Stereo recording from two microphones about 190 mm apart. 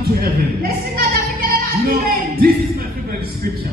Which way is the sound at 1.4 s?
50° right (ahead or behind).